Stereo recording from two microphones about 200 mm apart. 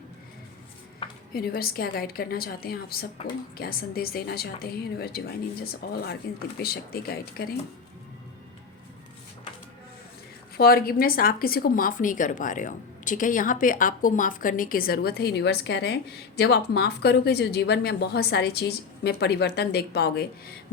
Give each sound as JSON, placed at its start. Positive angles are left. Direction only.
{"t": 1.3, "sound": "a woman's voice", "side_deg": 50}
{"t": 10.6, "sound": "a woman's voice", "side_deg": 50}